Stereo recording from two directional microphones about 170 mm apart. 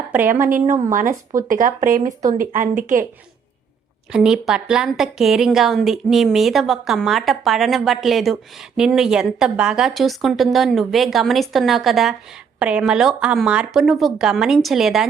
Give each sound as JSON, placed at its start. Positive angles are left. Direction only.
{"t": 0.1, "sound": "a woman's voice", "side_deg": -10}
{"t": 1.4, "sound": "speech", "side_deg": -50}
{"t": 4.1, "sound": "a woman's voice", "side_deg": -5}